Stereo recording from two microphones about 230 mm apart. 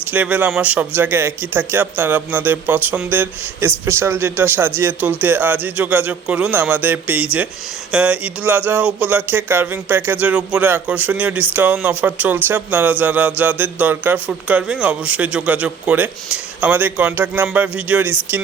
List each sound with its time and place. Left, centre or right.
0.1 s speech: centre